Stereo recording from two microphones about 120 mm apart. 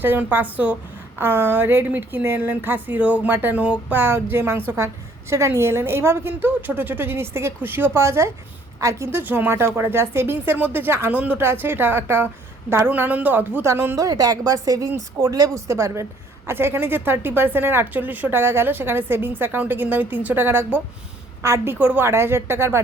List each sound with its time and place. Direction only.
0.0 s a woman's voice: 15° right (ahead or behind)